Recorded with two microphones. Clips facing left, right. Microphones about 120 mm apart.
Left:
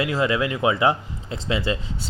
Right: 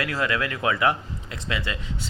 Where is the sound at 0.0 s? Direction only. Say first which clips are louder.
Left 4 dB; 20° left (ahead or behind).